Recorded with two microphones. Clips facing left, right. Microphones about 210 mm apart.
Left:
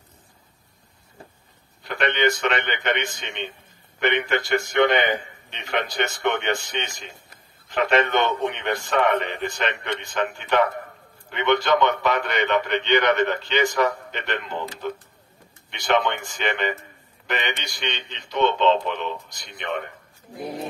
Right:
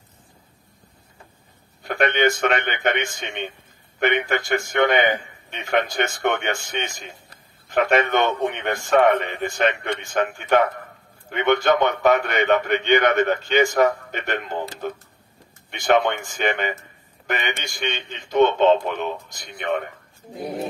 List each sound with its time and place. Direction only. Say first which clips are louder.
1.8 s a man's voice: right 3 dB; 50° right (ahead or behind)